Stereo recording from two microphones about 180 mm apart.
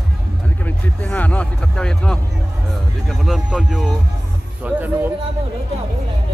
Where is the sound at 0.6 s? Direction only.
10° left (ahead or behind); by 5.1 s 10° right (ahead or behind).